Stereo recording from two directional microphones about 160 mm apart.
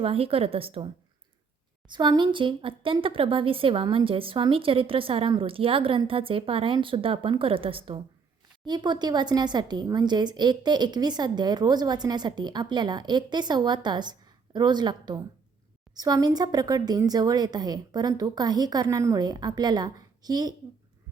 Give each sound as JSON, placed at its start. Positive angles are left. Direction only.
{"t": 0.0, "sound": "speech", "side_deg": -35}
{"t": 1.9, "sound": "speech", "side_deg": -30}